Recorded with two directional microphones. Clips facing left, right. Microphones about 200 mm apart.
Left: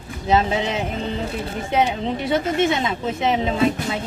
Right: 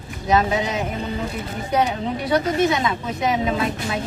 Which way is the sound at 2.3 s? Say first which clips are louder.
Right 1 dB; 25° left (ahead or behind).